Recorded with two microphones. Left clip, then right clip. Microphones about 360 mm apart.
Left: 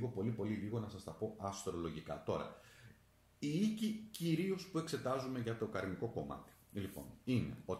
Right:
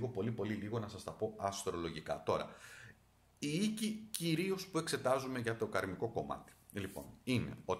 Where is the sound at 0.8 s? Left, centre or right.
Right.